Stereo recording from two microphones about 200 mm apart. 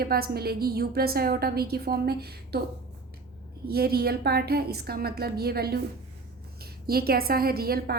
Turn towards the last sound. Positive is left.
turn(degrees=-50)  # may be behind; listen again after turning